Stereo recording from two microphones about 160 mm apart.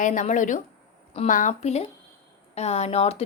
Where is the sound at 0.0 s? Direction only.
55° left (ahead or behind).